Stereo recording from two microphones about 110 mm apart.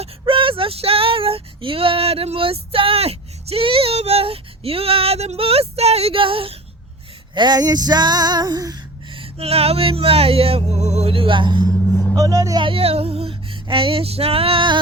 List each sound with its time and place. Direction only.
0.0 s speech: 55° right (ahead or behind)
7.3 s female singing: 40° right (ahead or behind)
9.1 s speech: 65° right (ahead or behind); by 11.1 s 85° right
11.1 s music: 50° right (ahead or behind)
11.8 s music: 20° left (ahead or behind)
12.1 s female singing: 35° right (ahead or behind)
12.6 s female singing: 60° right (ahead or behind)